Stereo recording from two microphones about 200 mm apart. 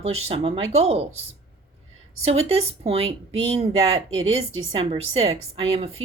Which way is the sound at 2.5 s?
30° right (ahead or behind).